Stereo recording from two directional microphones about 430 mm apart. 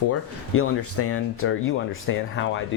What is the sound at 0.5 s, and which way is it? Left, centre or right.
Speech, left.